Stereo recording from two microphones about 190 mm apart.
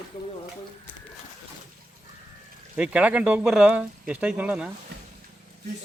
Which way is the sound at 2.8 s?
5° right (ahead or behind).